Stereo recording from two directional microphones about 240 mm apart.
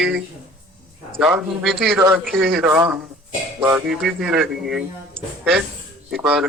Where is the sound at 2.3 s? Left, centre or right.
Right.